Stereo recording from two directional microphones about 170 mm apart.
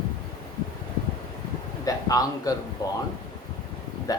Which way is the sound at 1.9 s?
20° left (ahead or behind).